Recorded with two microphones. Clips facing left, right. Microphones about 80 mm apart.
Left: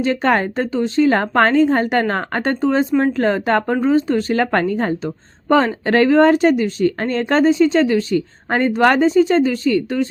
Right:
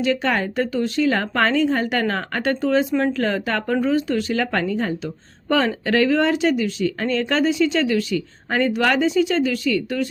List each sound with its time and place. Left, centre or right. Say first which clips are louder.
0.0 s speech: left 4 dB; left